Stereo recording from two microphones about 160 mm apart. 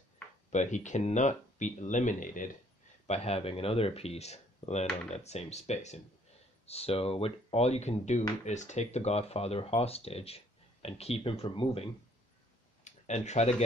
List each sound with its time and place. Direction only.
0.5 s speech: 50° left (ahead or behind)
3.1 s speech: 40° left (ahead or behind)
12.8 s speech: 45° left (ahead or behind)